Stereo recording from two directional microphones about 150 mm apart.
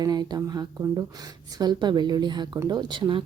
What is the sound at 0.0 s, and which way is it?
Speech, 25° right (ahead or behind).